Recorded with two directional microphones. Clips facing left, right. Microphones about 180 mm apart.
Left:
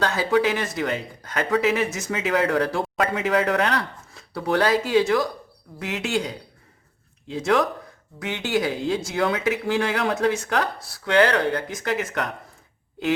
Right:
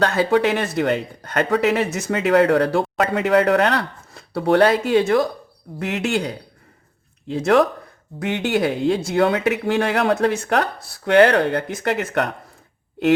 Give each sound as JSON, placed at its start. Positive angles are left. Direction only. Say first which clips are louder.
{"t": 0.0, "sound": "speech", "louder": "right 4 dB", "side_deg": -60}